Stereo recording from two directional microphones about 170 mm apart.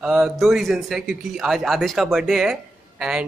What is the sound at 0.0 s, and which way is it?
A man's voice, 5° right (ahead or behind).